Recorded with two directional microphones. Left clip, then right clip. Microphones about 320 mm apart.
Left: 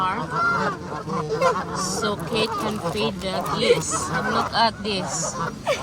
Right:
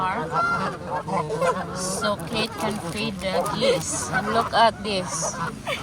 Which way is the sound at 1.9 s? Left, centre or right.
Centre.